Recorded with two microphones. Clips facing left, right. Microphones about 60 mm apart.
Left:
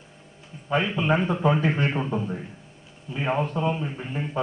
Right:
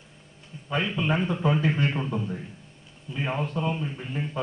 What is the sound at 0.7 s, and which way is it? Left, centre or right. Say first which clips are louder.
A man's voice: left 3 dB; centre.